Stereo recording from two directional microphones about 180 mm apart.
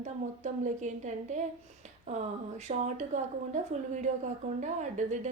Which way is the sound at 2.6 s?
40° right (ahead or behind).